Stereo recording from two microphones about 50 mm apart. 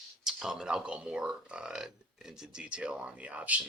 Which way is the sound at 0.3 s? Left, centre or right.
Centre.